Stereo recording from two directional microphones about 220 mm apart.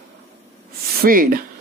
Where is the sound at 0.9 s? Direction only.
40° right (ahead or behind).